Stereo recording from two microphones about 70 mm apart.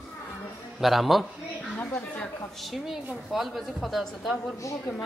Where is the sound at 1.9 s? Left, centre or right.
Centre.